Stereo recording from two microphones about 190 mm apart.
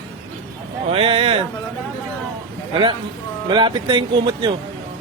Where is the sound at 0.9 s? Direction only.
30° right (ahead or behind).